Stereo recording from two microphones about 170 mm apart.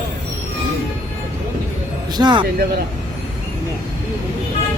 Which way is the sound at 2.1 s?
25° right (ahead or behind).